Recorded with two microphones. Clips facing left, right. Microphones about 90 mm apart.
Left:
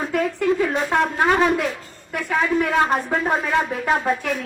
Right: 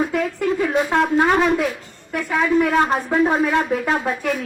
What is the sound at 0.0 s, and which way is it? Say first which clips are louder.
Shofar: right 1 dB; centre (ahead or behind).